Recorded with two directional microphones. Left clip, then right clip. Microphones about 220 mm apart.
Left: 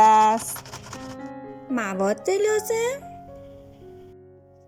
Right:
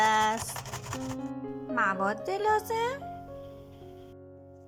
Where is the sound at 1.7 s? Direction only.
15° left (ahead or behind).